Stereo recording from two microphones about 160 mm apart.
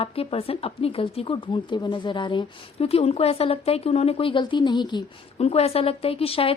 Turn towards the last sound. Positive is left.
turn(degrees=35)  # may be behind; listen again after turning